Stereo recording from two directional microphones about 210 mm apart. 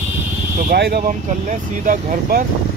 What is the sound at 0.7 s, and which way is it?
Speech, 50° right (ahead or behind).